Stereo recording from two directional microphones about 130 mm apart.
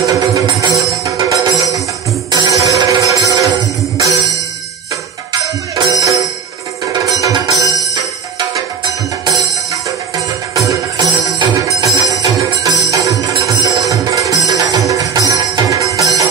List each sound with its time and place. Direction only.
0.0 s music: 25° right (ahead or behind)
5.9 s music: 25° right (ahead or behind)
10.7 s music: 30° right (ahead or behind)